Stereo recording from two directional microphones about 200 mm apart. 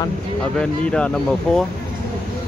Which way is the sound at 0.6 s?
5° left (ahead or behind).